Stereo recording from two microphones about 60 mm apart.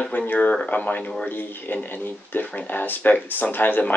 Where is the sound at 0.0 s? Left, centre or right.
Left.